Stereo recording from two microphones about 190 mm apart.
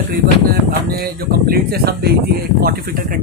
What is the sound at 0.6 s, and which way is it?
A man's voice, 50° right (ahead or behind).